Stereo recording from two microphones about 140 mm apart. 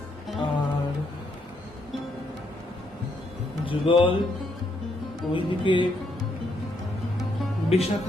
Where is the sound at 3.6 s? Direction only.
40° left (ahead or behind).